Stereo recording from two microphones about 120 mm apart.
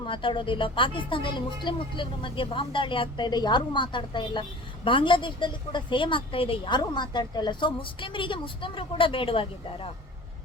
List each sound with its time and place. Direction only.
0.0 s a woman's voice: 45° left (ahead or behind)